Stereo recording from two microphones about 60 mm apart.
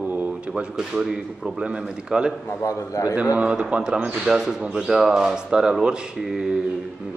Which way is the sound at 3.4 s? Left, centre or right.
Right.